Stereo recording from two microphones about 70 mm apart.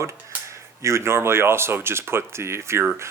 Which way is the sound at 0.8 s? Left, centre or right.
Right.